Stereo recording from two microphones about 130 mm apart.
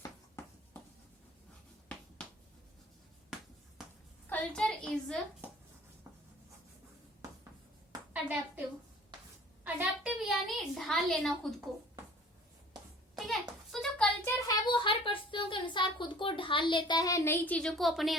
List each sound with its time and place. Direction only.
4.3 s a child's voice: 10° left (ahead or behind)
8.1 s a woman's voice: 10° right (ahead or behind)
9.6 s a woman's voice: 10° right (ahead or behind)
13.1 s a sound: centre (ahead or behind)
14.3 s a sound: 25° left (ahead or behind)
14.7 s a woman's voice: 40° left (ahead or behind); by 18.2 s centre (ahead or behind)